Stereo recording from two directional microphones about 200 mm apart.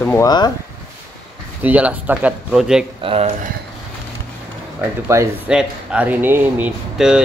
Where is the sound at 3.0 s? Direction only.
30° right (ahead or behind).